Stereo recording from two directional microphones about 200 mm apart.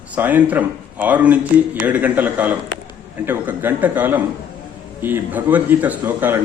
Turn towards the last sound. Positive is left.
turn(degrees=-10)  # may be behind; listen again after turning